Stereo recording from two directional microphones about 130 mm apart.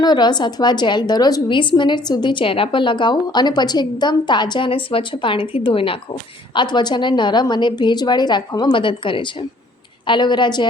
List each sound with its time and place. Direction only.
0.0 s a woman's voice: 35° left (ahead or behind)